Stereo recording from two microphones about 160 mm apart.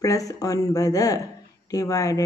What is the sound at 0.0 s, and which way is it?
A woman's voice, 20° left (ahead or behind).